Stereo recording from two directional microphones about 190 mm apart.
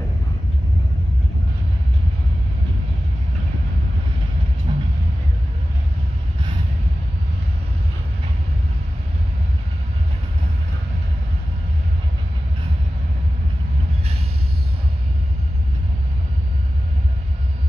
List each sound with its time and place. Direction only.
4.7 s music: 25° right (ahead or behind)